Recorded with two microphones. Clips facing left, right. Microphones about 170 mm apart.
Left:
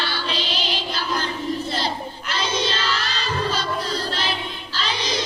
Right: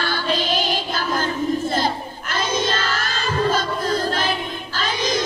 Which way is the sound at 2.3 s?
50° right (ahead or behind).